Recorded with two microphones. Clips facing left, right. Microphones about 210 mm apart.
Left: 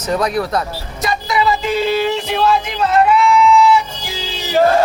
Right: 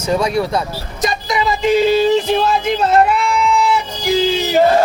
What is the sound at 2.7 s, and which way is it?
Music, 50° right (ahead or behind).